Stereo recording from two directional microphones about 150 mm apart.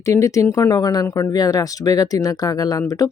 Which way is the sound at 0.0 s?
20° left (ahead or behind).